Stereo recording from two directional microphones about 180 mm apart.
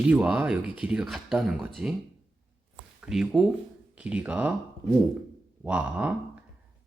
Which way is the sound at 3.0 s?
5° right (ahead or behind).